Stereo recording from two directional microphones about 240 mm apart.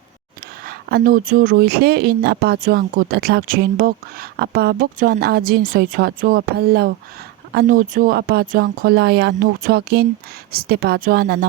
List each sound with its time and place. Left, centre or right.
0.6 s speech: right